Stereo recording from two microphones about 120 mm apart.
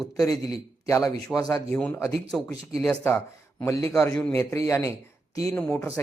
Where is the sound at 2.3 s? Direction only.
5° left (ahead or behind).